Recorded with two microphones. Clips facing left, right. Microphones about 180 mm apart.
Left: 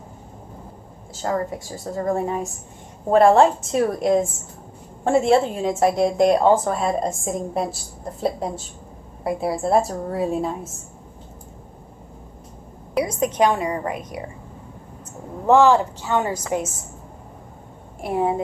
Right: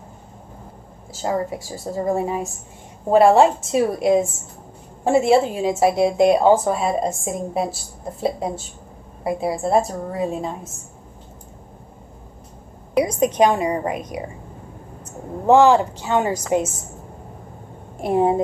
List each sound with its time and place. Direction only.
1.2 s a woman's voice: 15° right (ahead or behind); by 10.7 s 5° left (ahead or behind)
13.0 s a woman's voice: 20° right (ahead or behind)
15.4 s a woman's voice: 15° right (ahead or behind)
18.0 s a woman's voice: 25° right (ahead or behind)